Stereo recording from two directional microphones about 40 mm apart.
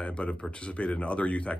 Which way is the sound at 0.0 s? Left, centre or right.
Left.